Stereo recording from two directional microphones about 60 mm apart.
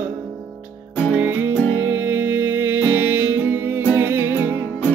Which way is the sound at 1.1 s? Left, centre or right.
Right.